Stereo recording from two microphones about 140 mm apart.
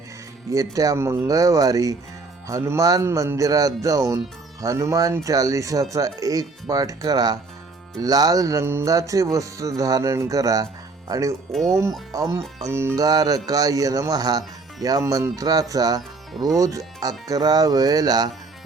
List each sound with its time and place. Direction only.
0.5 s speech: 25° right (ahead or behind)
12.4 s speech: centre (ahead or behind)
12.7 s speech: 15° right (ahead or behind)